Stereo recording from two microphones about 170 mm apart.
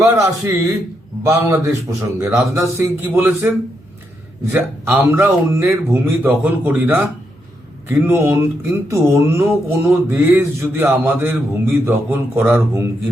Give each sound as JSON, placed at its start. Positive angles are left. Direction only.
{"t": 0.0, "sound": "a man's voice", "side_deg": -20}
{"t": 4.5, "sound": "speech", "side_deg": -15}